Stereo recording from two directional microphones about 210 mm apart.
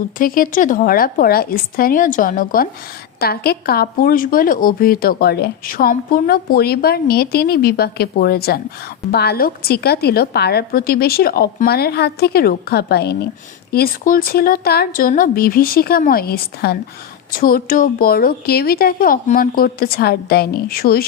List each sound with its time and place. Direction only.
0.2 s a woman's voice: 40° left (ahead or behind)